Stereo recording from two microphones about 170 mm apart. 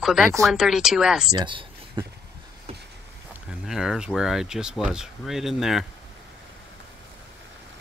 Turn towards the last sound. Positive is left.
turn(degrees=0)  # may be behind; listen again after turning